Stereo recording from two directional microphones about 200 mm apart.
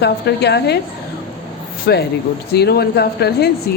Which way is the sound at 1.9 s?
50° left (ahead or behind).